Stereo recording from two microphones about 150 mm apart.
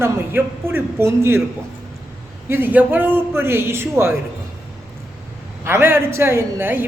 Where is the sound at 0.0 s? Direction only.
15° right (ahead or behind).